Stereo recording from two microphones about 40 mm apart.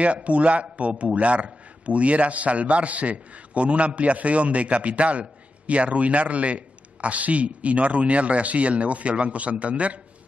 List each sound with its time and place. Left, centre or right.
0.0 s a man's voice: right